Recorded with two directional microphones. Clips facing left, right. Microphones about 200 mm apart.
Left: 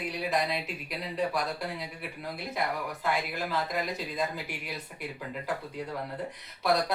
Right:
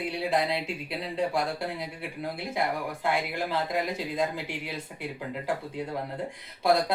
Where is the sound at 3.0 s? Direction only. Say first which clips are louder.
Right 3 dB; 25° right (ahead or behind).